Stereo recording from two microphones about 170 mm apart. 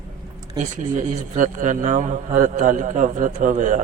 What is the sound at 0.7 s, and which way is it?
A man's voice, 50° right (ahead or behind).